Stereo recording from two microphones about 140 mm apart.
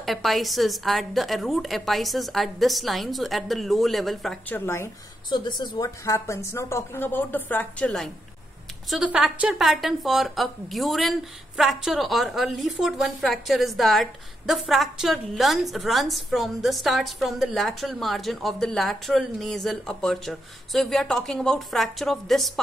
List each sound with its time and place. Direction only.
0.0 s a woman's voice: centre (ahead or behind)
4.5 s speech: 15° left (ahead or behind)
5.3 s a woman's voice: 30° left (ahead or behind); by 22.5 s centre (ahead or behind)